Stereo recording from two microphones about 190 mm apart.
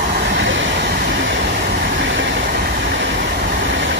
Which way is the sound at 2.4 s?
50° right (ahead or behind).